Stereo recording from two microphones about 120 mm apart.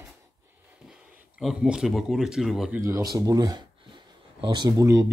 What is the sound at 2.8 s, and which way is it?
Speech, 25° right (ahead or behind).